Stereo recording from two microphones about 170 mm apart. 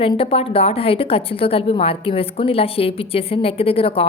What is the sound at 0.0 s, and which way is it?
A woman's voice, 35° left (ahead or behind).